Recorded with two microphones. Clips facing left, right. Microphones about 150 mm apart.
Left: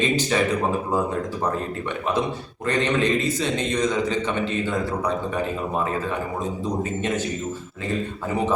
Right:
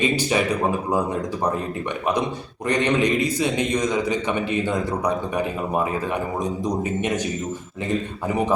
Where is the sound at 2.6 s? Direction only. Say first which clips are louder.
Right 1 dB; 15° right (ahead or behind).